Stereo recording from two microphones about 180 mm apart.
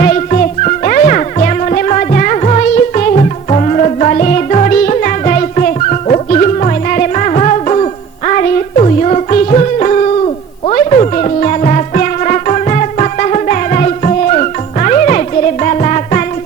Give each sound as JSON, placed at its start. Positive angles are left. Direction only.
{"t": 0.0, "sound": "music", "side_deg": 40}